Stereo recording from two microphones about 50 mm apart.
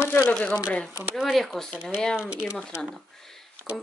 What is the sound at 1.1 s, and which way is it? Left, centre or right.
Speech, centre.